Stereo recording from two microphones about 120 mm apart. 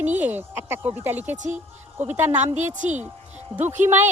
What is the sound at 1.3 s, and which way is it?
Speech, 90° right.